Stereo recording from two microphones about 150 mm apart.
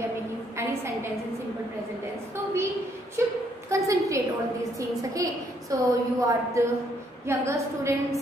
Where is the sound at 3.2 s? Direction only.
15° right (ahead or behind).